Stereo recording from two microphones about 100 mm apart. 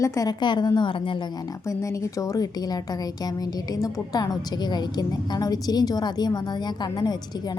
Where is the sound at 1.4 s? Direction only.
35° left (ahead or behind).